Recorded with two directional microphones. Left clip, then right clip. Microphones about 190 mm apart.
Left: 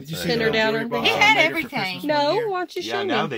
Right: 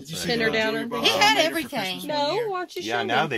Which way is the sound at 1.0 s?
10° right (ahead or behind).